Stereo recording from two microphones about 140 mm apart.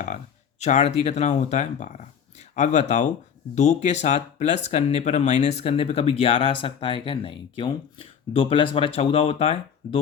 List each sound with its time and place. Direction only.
0.6 s speech: 55° left (ahead or behind)